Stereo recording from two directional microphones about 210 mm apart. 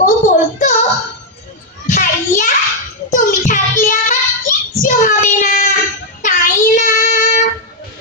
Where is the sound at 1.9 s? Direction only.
40° left (ahead or behind).